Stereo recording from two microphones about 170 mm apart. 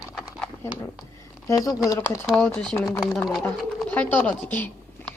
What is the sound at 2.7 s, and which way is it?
Speech, 20° left (ahead or behind).